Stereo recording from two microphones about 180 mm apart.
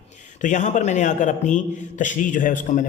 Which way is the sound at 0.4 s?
45° left (ahead or behind).